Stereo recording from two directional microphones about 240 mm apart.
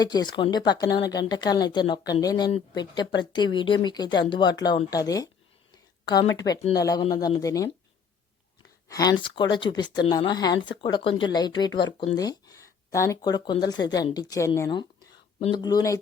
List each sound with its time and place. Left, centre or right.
0.0 s speech: centre
8.9 s speech: centre